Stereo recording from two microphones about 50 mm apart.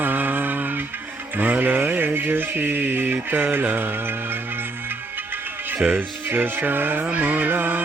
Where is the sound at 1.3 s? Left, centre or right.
Right.